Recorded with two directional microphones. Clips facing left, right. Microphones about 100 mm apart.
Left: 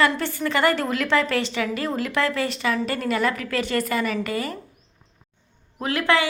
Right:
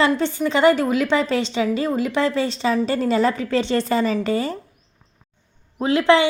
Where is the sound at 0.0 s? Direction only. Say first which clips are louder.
Right 3 dB; 20° right (ahead or behind).